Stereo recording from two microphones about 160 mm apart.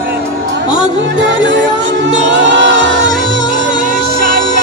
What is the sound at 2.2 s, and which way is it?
Music, 90° right.